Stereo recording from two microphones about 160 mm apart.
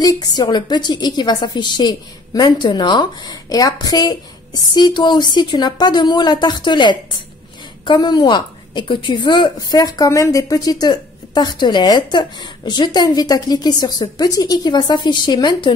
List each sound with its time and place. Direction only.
0.0 s a woman's voice: 25° left (ahead or behind)